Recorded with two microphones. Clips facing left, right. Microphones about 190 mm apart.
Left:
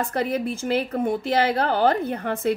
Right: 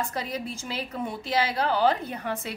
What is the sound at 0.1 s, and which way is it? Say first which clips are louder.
A woman's voice: left 8 dB; 60° left (ahead or behind).